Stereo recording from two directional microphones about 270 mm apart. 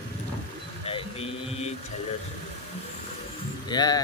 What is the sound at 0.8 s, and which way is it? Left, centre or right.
Speech, left.